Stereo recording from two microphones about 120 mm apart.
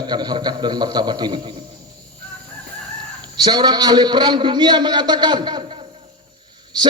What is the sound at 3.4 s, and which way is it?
A man's voice, 35° right (ahead or behind).